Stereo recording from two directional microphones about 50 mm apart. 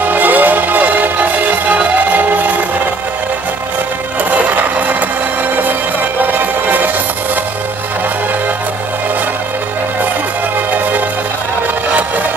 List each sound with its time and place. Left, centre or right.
0.1 s music: right
4.3 s music: right
6.3 s music: right